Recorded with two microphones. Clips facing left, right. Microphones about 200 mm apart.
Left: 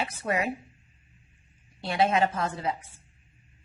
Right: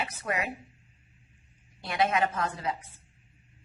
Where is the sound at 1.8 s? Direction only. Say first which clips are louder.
Left 3 dB; 30° left (ahead or behind).